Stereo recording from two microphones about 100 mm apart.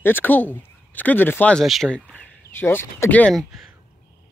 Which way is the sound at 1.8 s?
10° left (ahead or behind).